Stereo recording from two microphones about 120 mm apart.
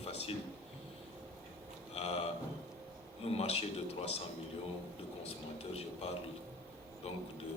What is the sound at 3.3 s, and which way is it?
Speech, 55° left (ahead or behind).